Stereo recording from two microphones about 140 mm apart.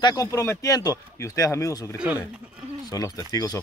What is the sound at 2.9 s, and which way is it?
Speech, 25° left (ahead or behind).